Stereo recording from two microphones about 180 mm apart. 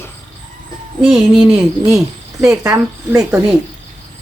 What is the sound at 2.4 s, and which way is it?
Speech, 20° right (ahead or behind).